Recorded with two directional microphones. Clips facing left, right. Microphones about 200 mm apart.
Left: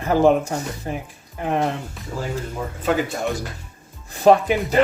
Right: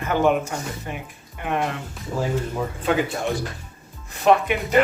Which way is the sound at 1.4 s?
35° left (ahead or behind).